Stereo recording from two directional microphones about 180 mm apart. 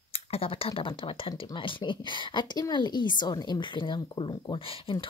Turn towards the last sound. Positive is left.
turn(degrees=30)  # may be behind; listen again after turning